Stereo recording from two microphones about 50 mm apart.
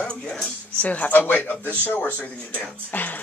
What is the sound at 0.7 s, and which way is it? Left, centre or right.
Speech, left.